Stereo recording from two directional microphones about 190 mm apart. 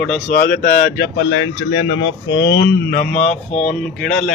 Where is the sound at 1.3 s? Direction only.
90° left; by 3.2 s 45° left (ahead or behind).